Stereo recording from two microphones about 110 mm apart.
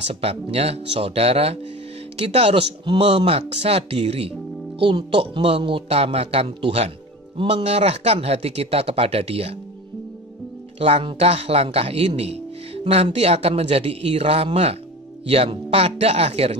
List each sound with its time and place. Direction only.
0.0 s speech: 65° right (ahead or behind)
4.7 s speech: 50° right (ahead or behind); by 9.6 s 65° right (ahead or behind)
10.8 s speech: 60° right (ahead or behind)